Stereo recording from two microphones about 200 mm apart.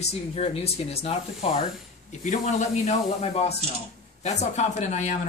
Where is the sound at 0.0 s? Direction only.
30° left (ahead or behind).